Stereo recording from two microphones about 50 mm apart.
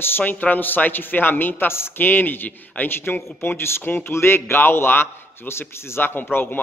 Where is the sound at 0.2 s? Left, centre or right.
Left.